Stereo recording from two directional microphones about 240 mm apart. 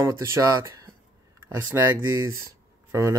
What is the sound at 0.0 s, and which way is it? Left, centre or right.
Speech, centre.